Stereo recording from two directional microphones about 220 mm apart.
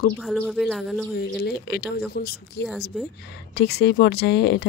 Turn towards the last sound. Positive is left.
turn(degrees=50)  # may be behind; listen again after turning